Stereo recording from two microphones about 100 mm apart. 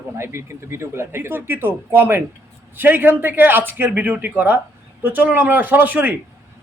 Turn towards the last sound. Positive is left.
turn(degrees=-15)  # may be behind; listen again after turning